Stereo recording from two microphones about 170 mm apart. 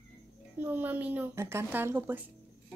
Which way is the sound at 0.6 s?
10° right (ahead or behind).